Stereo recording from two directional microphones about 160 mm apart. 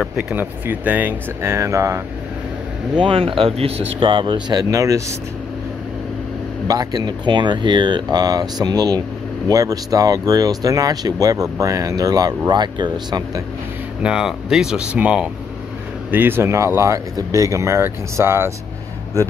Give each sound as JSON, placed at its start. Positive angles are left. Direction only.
{"t": 0.0, "sound": "speech", "side_deg": -5}
{"t": 3.0, "sound": "speech", "side_deg": -35}
{"t": 6.7, "sound": "speech", "side_deg": -25}
{"t": 14.0, "sound": "speech", "side_deg": -5}